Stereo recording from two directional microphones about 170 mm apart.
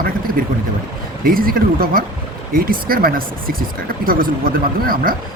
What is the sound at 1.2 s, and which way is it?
Speech, 60° right (ahead or behind).